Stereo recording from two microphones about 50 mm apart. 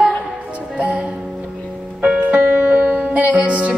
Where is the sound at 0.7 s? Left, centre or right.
Right.